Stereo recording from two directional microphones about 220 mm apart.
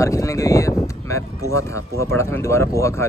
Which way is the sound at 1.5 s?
15° left (ahead or behind).